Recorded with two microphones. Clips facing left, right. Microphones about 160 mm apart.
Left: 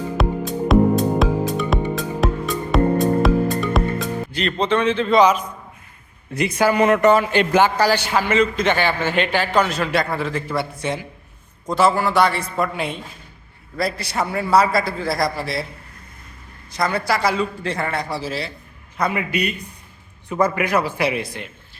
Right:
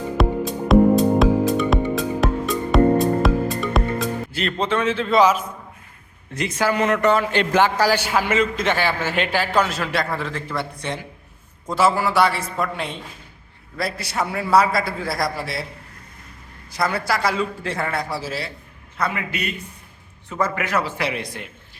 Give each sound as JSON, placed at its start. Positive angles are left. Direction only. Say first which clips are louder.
{"t": 0.2, "sound": "music", "louder": "right 1 dB", "side_deg": 0}
{"t": 6.3, "sound": "a man's voice", "louder": "left 4 dB", "side_deg": 10}
{"t": 7.8, "sound": "a man's voice", "louder": "left 1 dB", "side_deg": -10}
{"t": 11.7, "sound": "a man's voice", "louder": "left 2 dB", "side_deg": -5}
{"t": 16.7, "sound": "a man's voice", "louder": "left 1 dB", "side_deg": -5}
{"t": 18.9, "sound": "a man's voice", "louder": "left 4 dB", "side_deg": 15}